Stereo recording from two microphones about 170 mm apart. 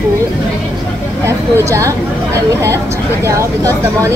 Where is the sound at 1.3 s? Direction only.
15° right (ahead or behind).